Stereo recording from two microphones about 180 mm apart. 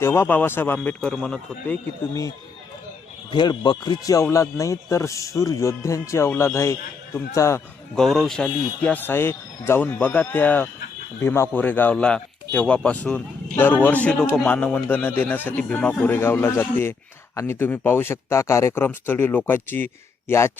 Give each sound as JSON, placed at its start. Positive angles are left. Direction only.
{"t": 0.0, "sound": "speech", "side_deg": 15}
{"t": 3.3, "sound": "speech", "side_deg": 25}
{"t": 7.9, "sound": "speech", "side_deg": 0}